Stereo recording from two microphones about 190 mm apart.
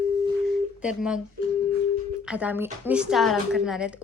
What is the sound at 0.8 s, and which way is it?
Speech, 5° right (ahead or behind).